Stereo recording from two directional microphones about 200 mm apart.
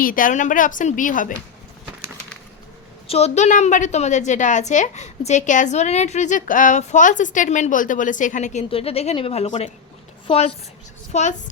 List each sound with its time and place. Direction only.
0.0 s a woman's voice: 45° left (ahead or behind)
3.1 s a woman's voice: 30° left (ahead or behind)